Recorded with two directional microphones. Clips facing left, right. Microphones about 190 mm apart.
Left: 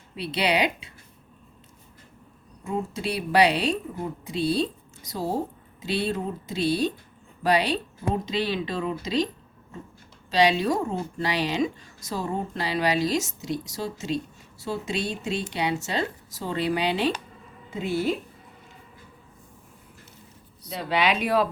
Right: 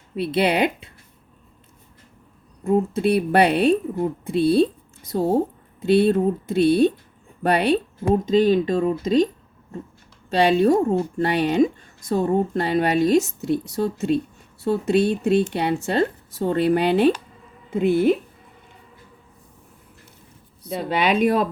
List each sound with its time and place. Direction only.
0.2 s speech: 50° right (ahead or behind)
2.6 s speech: 55° right (ahead or behind)
10.2 s speech: 55° right (ahead or behind)
20.7 s speech: 50° right (ahead or behind)